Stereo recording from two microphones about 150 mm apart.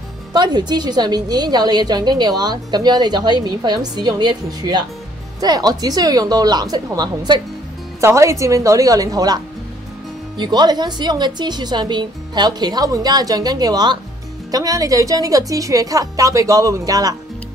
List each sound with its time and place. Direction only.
0.3 s a woman's voice: 30° right (ahead or behind)